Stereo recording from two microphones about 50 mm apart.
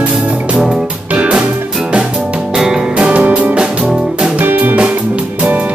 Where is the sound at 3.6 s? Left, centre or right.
Centre.